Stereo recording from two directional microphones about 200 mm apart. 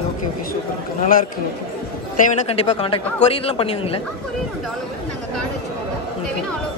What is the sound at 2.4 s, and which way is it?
A man's voice, 30° left (ahead or behind).